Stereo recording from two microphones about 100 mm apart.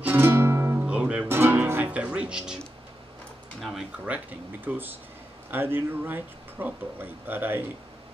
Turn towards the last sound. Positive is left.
turn(degrees=-20)  # may be behind; listen again after turning